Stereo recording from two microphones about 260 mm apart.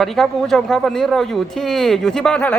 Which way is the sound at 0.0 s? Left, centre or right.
Centre.